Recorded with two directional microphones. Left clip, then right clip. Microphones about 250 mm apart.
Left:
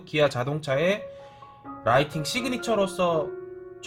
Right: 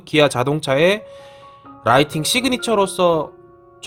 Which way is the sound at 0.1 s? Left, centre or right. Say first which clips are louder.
Right 8 dB; right.